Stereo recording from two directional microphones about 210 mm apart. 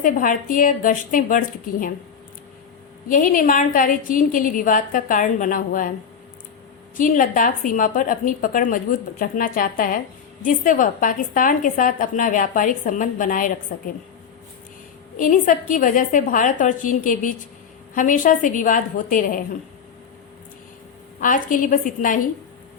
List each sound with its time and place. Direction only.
0.0 s a woman's voice: 40° left (ahead or behind)
3.1 s a woman's voice: 40° left (ahead or behind)
6.9 s a woman's voice: 40° left (ahead or behind)
15.2 s a woman's voice: 40° left (ahead or behind)
21.2 s a woman's voice: 40° left (ahead or behind)